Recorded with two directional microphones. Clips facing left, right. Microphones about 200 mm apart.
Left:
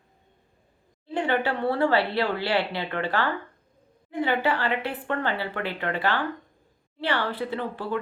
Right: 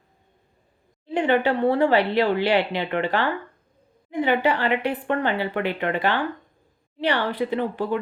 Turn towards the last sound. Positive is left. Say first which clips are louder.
# right 5 dB
turn(degrees=-15)  # may be behind; listen again after turning